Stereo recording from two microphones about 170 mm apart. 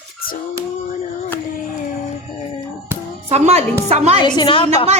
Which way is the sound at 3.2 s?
40° right (ahead or behind).